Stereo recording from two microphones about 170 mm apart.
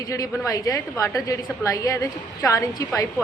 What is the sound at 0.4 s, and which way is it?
A woman's voice, 20° left (ahead or behind).